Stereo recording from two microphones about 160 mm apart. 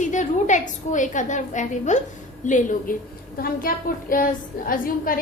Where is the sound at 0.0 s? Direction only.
50° left (ahead or behind).